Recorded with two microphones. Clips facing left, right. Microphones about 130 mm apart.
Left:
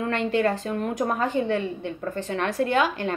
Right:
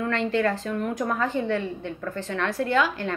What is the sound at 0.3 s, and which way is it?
A woman's voice, 20° left (ahead or behind).